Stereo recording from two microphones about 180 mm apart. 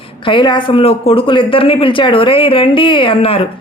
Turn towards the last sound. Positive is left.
turn(degrees=30)  # may be behind; listen again after turning